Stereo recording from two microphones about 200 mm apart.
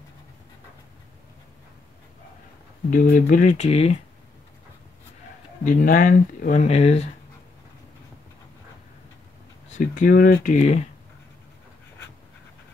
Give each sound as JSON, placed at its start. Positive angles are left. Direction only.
{"t": 2.9, "sound": "speech", "side_deg": 45}
{"t": 5.6, "sound": "speech", "side_deg": 45}
{"t": 9.7, "sound": "speech", "side_deg": 40}